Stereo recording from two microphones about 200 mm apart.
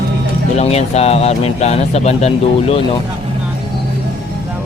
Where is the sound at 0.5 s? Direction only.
30° left (ahead or behind).